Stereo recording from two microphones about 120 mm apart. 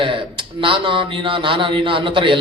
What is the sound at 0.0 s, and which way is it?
Speech, 45° right (ahead or behind).